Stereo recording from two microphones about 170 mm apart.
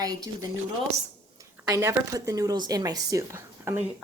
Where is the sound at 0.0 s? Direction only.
20° right (ahead or behind).